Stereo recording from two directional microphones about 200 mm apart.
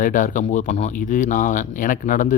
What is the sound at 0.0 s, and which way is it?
Speech, 40° left (ahead or behind).